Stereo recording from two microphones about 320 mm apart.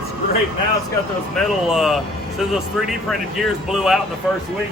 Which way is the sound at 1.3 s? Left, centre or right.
Centre.